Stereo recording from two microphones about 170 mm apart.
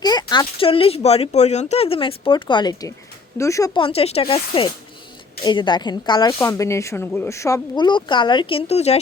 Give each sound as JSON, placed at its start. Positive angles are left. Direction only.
{"t": 0.0, "sound": "speech", "side_deg": 25}
{"t": 3.8, "sound": "speech", "side_deg": 35}